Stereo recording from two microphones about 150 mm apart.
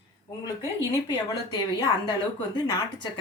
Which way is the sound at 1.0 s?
30° left (ahead or behind).